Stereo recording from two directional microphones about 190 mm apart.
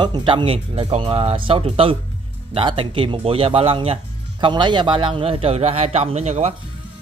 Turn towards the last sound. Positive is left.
turn(degrees=-35)  # may be behind; listen again after turning